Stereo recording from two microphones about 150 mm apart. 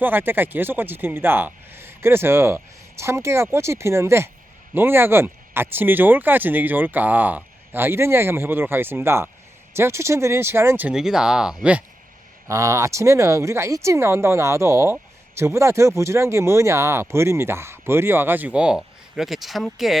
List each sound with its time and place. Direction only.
0.0 s speech: 15° right (ahead or behind)
12.5 s speech: 20° right (ahead or behind); by 20.0 s centre (ahead or behind)